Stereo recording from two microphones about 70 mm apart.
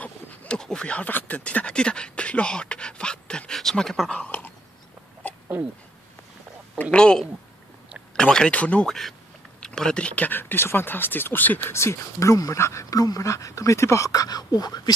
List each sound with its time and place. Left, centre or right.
0.0 s a sound: left
0.6 s speech: centre
4.1 s a sound: centre
6.8 s speech: centre
8.8 s speech: centre; by 11.7 s left
11.7 s speech: left
12.9 s speech: left